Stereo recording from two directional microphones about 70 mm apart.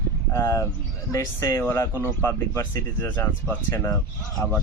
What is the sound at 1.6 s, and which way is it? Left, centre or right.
Speech, left.